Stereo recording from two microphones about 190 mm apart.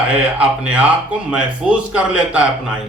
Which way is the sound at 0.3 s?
5° right (ahead or behind).